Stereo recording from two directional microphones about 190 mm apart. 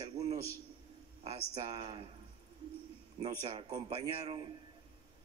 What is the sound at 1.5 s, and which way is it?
Speech, 30° right (ahead or behind).